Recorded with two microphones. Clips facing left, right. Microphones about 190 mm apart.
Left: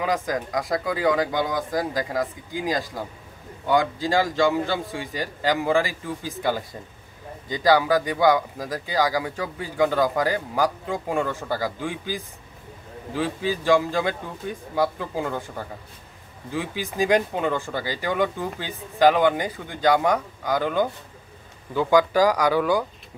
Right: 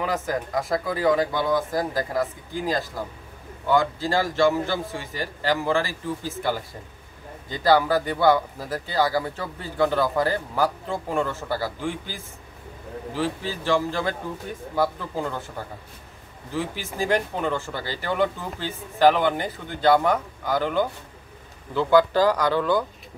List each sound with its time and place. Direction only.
0.1 s speech: 15° left (ahead or behind)
4.0 s speech: 15° left (ahead or behind)
16.5 s speech: 15° left (ahead or behind)